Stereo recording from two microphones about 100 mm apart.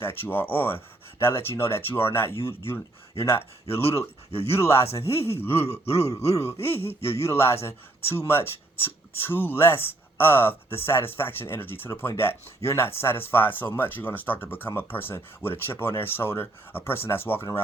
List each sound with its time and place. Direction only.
0.0 s speech: 20° left (ahead or behind)
3.7 s speech: 90° left
4.4 s speech: 25° left (ahead or behind)
5.8 s speech: 90° left
6.3 s speech: 25° left (ahead or behind)